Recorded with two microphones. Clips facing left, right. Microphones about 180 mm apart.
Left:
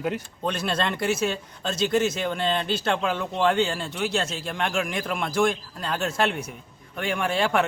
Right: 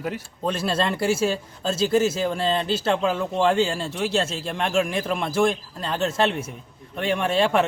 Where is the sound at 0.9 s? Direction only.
30° right (ahead or behind).